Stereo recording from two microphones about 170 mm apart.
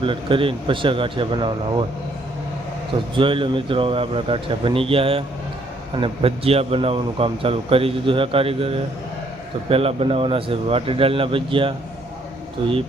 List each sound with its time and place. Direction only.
0.0 s a man's voice: 30° right (ahead or behind)
3.2 s a man's voice: 30° right (ahead or behind)